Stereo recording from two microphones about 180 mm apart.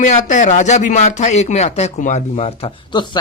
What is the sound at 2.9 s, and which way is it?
Speech, 25° left (ahead or behind).